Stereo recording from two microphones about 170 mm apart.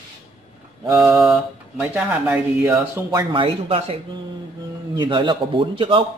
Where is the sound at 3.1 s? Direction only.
25° right (ahead or behind).